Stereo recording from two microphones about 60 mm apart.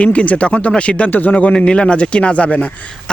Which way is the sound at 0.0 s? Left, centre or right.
Left.